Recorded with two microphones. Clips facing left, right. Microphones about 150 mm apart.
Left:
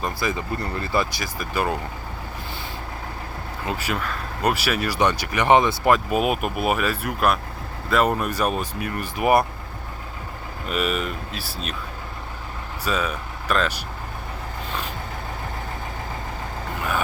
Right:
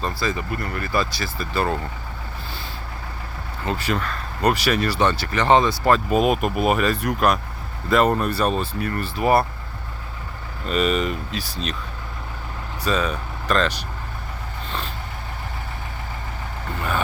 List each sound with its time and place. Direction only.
0.0 s speech: 20° left (ahead or behind)
3.7 s speech: 10° left (ahead or behind)
10.7 s speech: 5° left (ahead or behind)
12.8 s speech: 10° left (ahead or behind)